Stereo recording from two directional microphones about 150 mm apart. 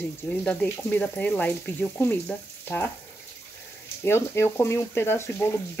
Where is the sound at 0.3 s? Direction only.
5° left (ahead or behind).